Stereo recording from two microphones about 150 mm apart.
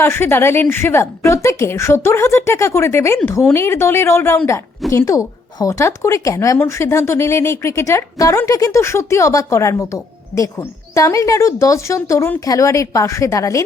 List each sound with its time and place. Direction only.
0.0 s a woman's voice: 15° left (ahead or behind)